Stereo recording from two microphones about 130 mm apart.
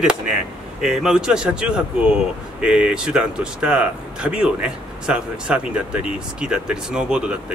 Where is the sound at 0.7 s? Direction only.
5° right (ahead or behind).